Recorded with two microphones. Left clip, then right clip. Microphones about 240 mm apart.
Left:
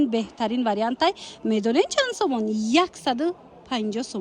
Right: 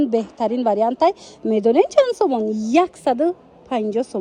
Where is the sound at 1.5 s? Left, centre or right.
Centre.